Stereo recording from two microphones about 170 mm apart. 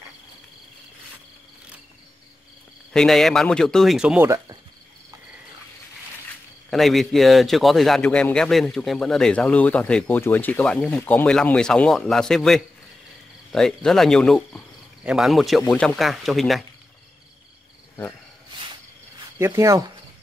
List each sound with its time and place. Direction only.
2.9 s a man's voice: centre (ahead or behind)
6.7 s a man's voice: centre (ahead or behind)
19.3 s speech: 15° right (ahead or behind)